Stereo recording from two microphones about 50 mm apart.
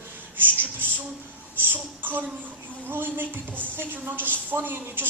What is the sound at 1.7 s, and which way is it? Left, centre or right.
Speech, right.